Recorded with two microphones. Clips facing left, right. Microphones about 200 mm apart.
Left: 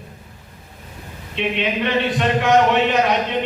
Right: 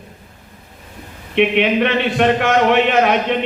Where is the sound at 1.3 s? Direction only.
65° right (ahead or behind).